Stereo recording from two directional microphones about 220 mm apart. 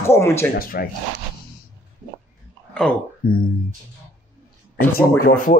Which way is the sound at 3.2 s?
45° left (ahead or behind).